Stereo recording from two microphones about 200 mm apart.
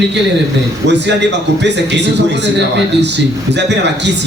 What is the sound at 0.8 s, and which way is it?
A man's voice, 60° right (ahead or behind).